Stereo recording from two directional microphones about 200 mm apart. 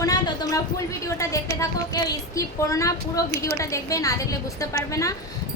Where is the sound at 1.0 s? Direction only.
15° left (ahead or behind).